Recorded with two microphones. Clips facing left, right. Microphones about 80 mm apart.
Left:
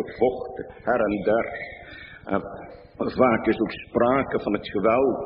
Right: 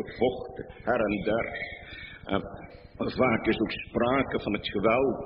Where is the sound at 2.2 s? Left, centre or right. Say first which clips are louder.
Left 4 dB; left.